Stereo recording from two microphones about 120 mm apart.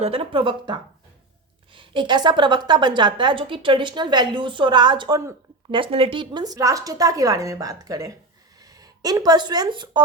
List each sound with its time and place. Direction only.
0.0 s a woman's voice: 50° right (ahead or behind)
5.7 s a woman's voice: 45° right (ahead or behind)